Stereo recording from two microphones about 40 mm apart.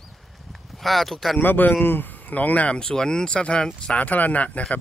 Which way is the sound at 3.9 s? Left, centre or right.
Left.